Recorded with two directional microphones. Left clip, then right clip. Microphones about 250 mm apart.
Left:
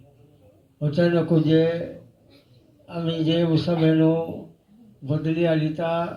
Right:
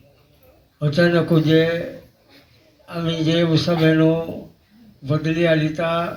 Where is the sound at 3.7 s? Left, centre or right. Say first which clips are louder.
Right 3 dB; right.